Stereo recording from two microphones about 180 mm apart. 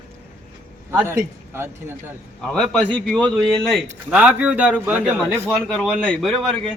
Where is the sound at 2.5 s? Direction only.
5° left (ahead or behind).